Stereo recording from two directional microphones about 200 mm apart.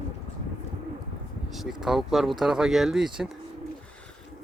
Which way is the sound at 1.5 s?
Centre (ahead or behind).